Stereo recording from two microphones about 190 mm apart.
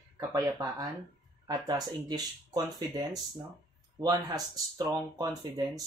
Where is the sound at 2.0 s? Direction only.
20° right (ahead or behind).